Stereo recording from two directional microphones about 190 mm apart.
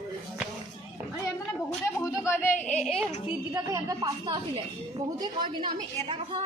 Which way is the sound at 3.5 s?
20° right (ahead or behind).